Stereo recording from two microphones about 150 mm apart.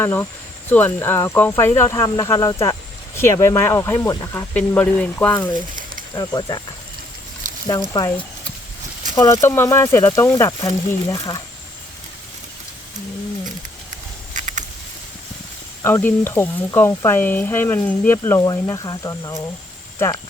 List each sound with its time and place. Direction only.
0.0 s speech: 15° left (ahead or behind)
4.5 s speech: 10° left (ahead or behind)
6.1 s speech: 25° left (ahead or behind)
7.9 s speech: 25° left (ahead or behind)
9.1 s speech: 20° left (ahead or behind)
14.3 s a sound: 55° right (ahead or behind)
15.8 s speech: 15° left (ahead or behind)